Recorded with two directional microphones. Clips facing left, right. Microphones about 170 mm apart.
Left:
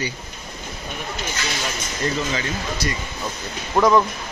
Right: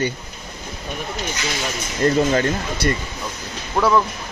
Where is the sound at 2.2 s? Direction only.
50° right (ahead or behind).